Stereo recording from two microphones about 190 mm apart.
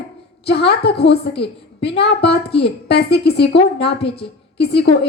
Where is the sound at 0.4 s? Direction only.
60° left (ahead or behind).